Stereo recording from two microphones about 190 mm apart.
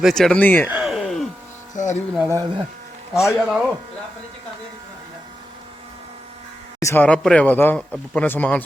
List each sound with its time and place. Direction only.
0.0 s speech: centre (ahead or behind)
0.7 s a sound: 5° right (ahead or behind)
1.7 s music: 40° left (ahead or behind)
2.1 s speech: 15° right (ahead or behind)
3.2 s speech: 5° right (ahead or behind)
6.7 s speech: 15° left (ahead or behind)